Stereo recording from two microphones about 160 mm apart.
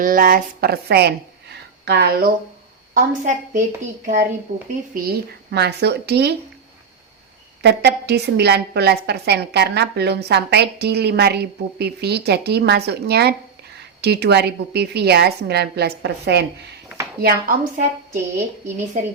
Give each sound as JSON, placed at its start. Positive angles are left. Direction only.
{"t": 0.0, "sound": "a woman's voice", "side_deg": -60}
{"t": 2.9, "sound": "a woman's voice", "side_deg": -55}
{"t": 4.9, "sound": "a woman's voice", "side_deg": -70}
{"t": 7.6, "sound": "a woman's voice", "side_deg": -90}
{"t": 17.2, "sound": "speech", "side_deg": -65}